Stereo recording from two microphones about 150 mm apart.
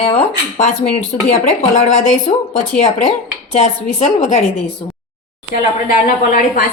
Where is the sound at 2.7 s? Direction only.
50° left (ahead or behind).